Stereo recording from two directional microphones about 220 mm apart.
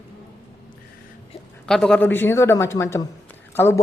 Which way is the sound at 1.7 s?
5° left (ahead or behind).